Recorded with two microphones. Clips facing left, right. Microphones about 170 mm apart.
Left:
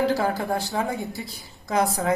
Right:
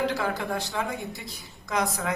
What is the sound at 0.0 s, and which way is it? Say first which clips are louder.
A woman's voice: left 5 dB; 35° left (ahead or behind).